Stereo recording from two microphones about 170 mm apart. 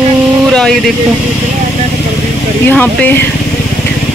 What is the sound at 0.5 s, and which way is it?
Vehicle, 5° left (ahead or behind).